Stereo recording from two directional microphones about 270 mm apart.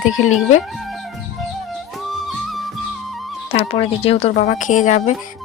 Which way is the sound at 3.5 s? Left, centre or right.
Left.